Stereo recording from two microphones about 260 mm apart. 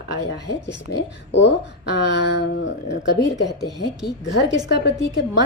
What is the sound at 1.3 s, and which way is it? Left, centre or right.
Speech, left.